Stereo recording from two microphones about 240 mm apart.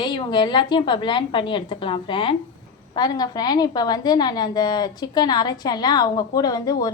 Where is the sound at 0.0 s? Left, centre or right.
Centre.